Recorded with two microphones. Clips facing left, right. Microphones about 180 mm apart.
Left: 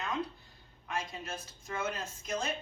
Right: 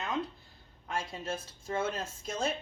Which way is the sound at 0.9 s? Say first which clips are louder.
Right 3 dB; 30° right (ahead or behind).